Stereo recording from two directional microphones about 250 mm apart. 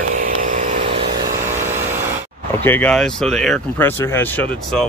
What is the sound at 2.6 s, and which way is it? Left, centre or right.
Speech, centre.